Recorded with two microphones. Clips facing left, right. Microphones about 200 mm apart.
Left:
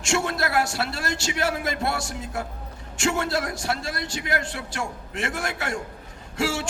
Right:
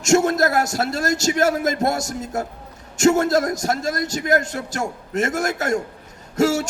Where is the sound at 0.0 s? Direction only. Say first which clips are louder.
Right 9 dB; 40° right (ahead or behind).